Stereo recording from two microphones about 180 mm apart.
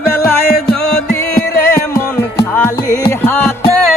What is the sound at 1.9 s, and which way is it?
Music, 10° left (ahead or behind).